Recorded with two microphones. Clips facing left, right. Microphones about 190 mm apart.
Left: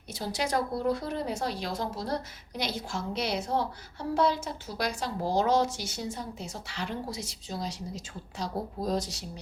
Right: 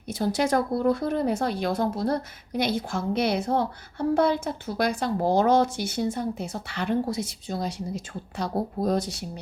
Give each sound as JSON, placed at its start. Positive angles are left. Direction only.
{"t": 0.1, "sound": "speech", "side_deg": -50}